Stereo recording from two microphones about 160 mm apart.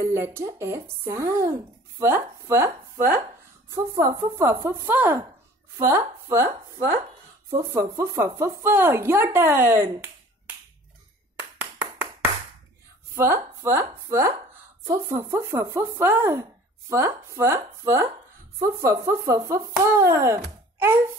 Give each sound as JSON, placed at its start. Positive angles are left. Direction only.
{"t": 0.0, "sound": "speech", "side_deg": -15}
{"t": 13.1, "sound": "speech", "side_deg": -15}